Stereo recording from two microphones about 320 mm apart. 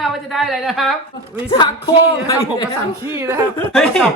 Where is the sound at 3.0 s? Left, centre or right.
Centre.